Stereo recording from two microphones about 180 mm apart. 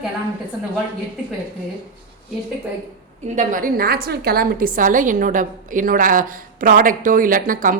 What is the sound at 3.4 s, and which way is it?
A woman's voice, 45° right (ahead or behind).